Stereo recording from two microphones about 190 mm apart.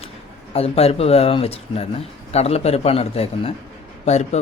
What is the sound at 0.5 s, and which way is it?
Speech, 30° left (ahead or behind).